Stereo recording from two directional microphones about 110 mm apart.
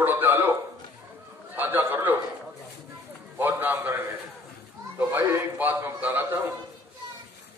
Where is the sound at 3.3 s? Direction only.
15° right (ahead or behind).